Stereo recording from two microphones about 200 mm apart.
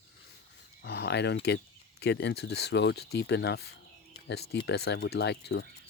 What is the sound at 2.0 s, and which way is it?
Speech, 55° left (ahead or behind).